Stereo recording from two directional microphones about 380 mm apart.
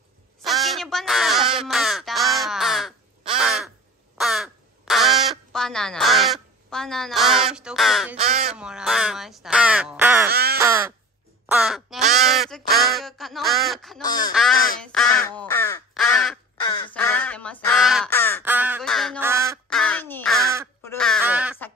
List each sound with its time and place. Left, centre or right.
0.4 s crow: centre
8.5 s speech: centre
10.3 s crow: right
10.6 s crow: centre
14.4 s speech: centre
14.8 s crow: centre
18.4 s quack: centre